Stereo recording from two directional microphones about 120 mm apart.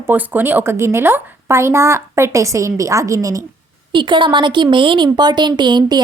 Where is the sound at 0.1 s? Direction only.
15° right (ahead or behind).